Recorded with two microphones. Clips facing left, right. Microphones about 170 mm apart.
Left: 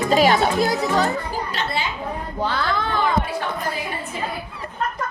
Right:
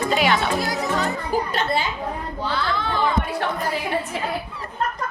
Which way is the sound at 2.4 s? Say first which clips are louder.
Left 2 dB; 45° left (ahead or behind).